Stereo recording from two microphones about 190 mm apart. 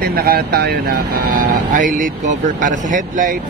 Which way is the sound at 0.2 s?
55° right (ahead or behind).